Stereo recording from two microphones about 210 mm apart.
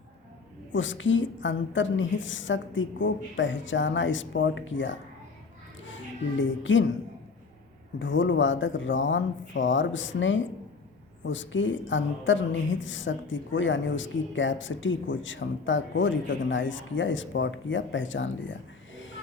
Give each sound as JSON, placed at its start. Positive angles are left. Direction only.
{"t": 0.7, "sound": "a woman's voice", "side_deg": 65}
{"t": 6.4, "sound": "a woman's voice", "side_deg": 65}
{"t": 7.9, "sound": "a woman's voice", "side_deg": 60}